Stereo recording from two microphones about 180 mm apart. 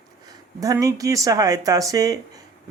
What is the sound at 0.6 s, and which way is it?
Speech, 20° right (ahead or behind).